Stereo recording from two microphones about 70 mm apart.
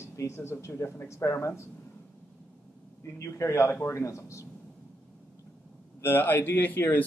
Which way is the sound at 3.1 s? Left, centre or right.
Left.